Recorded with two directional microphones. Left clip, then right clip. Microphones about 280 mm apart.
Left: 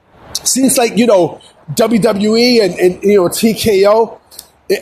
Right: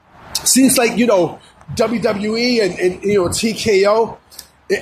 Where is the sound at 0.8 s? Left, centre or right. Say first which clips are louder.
Left 4 dB; left.